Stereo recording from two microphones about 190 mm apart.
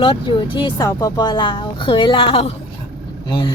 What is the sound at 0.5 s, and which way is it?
Speech, 25° left (ahead or behind).